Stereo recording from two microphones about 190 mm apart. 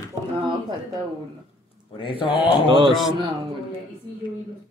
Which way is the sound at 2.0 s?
25° left (ahead or behind).